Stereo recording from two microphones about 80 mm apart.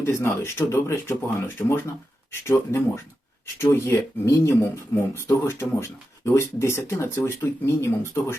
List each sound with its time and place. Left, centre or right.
0.0 s speech: left